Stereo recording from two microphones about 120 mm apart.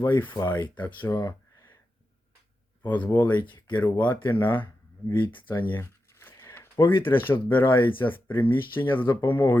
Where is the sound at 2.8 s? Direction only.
15° left (ahead or behind).